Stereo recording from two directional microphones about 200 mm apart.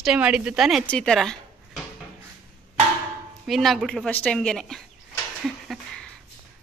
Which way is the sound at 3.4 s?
Centre (ahead or behind).